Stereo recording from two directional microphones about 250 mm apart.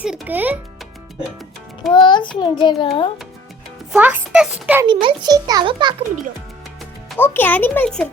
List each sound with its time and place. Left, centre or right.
0.0 s a child's voice: centre
1.9 s a child's voice: centre
3.9 s a child's voice: centre
4.9 s a child's voice: centre
7.1 s a child's voice: centre